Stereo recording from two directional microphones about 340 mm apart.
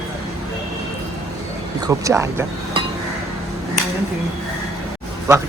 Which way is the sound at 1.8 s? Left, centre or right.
Centre.